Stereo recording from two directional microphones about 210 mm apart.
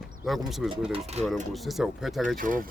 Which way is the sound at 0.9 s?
30° right (ahead or behind).